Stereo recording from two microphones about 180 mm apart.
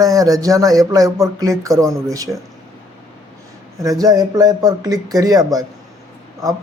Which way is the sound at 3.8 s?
20° right (ahead or behind).